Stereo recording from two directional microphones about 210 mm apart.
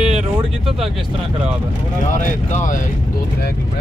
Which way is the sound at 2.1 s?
35° left (ahead or behind).